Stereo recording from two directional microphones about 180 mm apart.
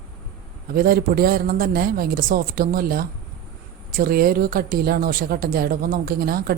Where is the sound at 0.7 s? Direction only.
55° right (ahead or behind).